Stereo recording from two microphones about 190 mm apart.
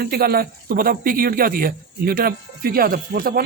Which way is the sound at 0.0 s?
55° right (ahead or behind).